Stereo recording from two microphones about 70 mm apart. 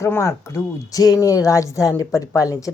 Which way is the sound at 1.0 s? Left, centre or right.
Left.